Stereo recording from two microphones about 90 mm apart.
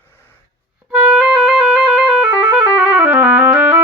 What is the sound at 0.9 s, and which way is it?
Music, 15° right (ahead or behind).